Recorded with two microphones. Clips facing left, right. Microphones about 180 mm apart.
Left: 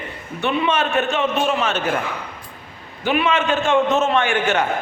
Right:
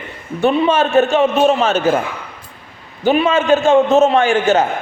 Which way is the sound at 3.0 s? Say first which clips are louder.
Right 6 dB; 40° right (ahead or behind).